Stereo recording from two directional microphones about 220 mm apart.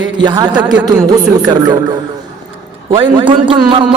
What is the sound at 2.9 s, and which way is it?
Speech, 25° right (ahead or behind).